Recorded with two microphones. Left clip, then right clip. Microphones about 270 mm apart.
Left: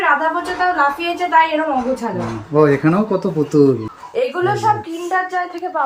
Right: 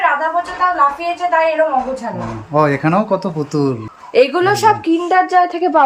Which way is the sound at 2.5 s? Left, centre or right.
Centre.